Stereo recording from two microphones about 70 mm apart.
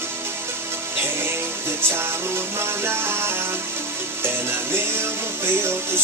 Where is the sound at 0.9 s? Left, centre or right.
Right.